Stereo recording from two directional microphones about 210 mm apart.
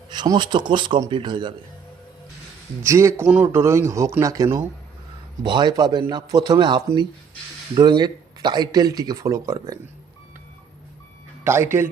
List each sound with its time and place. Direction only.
0.1 s speech: 20° right (ahead or behind)
2.8 s a man's voice: 15° right (ahead or behind)
11.4 s a man's voice: 10° right (ahead or behind)